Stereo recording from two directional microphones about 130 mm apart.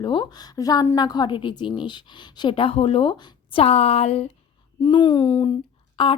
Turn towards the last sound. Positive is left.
turn(degrees=40)  # may be behind; listen again after turning